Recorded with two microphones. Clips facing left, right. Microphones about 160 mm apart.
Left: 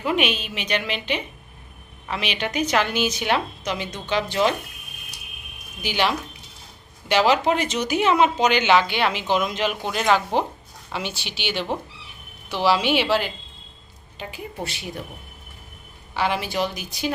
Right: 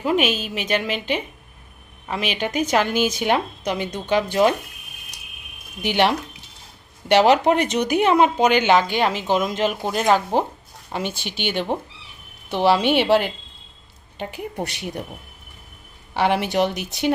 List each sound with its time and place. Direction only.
0.0 s a woman's voice: 40° right (ahead or behind)
5.8 s a woman's voice: 60° right (ahead or behind)
12.6 s speech: 55° right (ahead or behind)
16.1 s speech: 65° right (ahead or behind)